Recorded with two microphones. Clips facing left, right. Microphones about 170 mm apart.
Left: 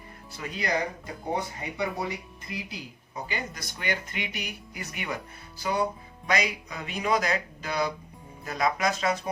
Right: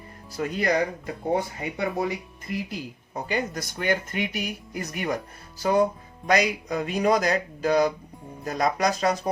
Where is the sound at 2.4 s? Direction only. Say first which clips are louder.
Right 8 dB; 50° right (ahead or behind).